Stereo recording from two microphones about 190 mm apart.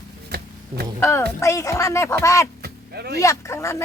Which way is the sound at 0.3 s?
55° right (ahead or behind).